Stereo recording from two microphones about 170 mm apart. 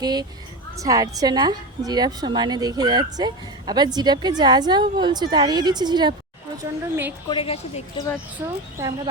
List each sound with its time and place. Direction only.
0.0 s a woman's voice: 25° right (ahead or behind)
6.6 s speech: 15° right (ahead or behind)
7.3 s speech: 30° left (ahead or behind)
8.4 s speech: 15° right (ahead or behind)